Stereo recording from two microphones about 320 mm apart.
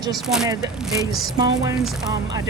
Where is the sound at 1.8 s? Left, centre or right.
Centre.